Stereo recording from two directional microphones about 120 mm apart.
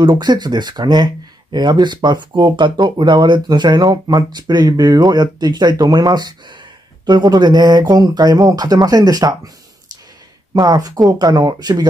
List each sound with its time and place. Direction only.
0.0 s speech: 35° right (ahead or behind)
10.5 s speech: 35° right (ahead or behind)